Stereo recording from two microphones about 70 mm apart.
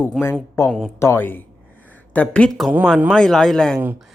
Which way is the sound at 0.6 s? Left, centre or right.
Left.